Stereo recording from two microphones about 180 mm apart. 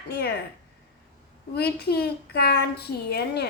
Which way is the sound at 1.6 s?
60° left (ahead or behind).